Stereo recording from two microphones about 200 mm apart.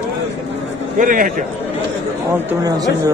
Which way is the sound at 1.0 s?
40° right (ahead or behind).